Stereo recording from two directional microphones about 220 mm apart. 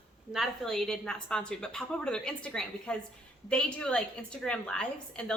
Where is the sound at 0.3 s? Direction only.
Centre (ahead or behind).